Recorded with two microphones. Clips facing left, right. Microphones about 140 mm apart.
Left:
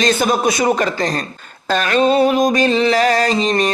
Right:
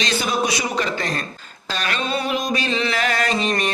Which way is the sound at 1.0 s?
35° left (ahead or behind).